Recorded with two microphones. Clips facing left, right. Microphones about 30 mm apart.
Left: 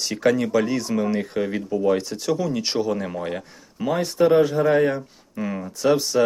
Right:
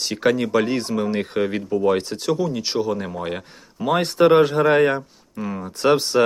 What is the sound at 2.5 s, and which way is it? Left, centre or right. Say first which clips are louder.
Speech: even; centre.